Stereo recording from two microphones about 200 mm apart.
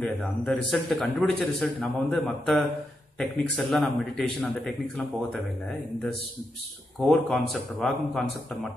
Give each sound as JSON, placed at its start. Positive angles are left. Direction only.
{"t": 0.0, "sound": "a man's voice", "side_deg": 5}
{"t": 7.0, "sound": "a man's voice", "side_deg": 0}